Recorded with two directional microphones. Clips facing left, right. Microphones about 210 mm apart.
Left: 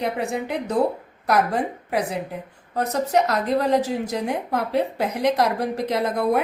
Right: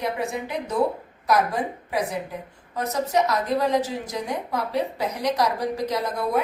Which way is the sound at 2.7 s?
60° left (ahead or behind).